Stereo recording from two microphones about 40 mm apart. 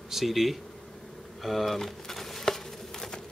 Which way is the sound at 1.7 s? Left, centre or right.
Centre.